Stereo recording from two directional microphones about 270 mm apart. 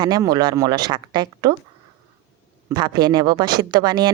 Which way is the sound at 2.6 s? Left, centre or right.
Centre.